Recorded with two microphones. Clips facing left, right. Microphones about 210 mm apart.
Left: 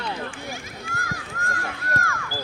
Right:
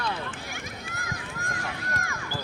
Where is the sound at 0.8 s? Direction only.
20° right (ahead or behind).